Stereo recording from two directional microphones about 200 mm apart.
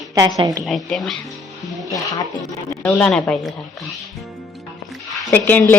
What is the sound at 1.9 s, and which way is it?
Speech, 15° left (ahead or behind).